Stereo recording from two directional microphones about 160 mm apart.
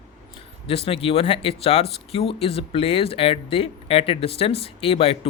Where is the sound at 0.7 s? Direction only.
35° left (ahead or behind).